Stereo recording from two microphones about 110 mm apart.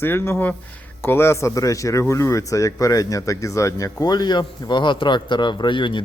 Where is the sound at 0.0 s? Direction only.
20° left (ahead or behind).